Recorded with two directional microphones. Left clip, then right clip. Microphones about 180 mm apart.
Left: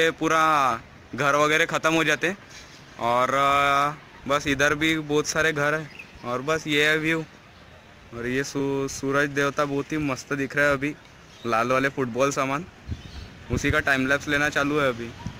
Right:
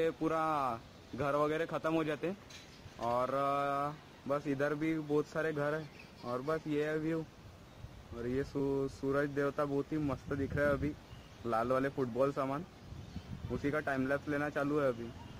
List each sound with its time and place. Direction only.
0.2 s speech: 10° left (ahead or behind)
3.8 s speech: 20° left (ahead or behind)